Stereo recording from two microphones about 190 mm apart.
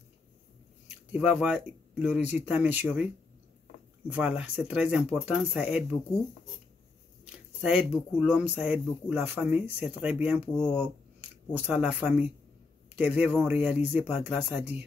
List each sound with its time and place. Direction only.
0.8 s speech: 5° right (ahead or behind)
4.1 s speech: 5° right (ahead or behind)
7.6 s speech: 5° right (ahead or behind)
10.4 s speech: 35° left (ahead or behind)
11.6 s a man's voice: 5° right (ahead or behind)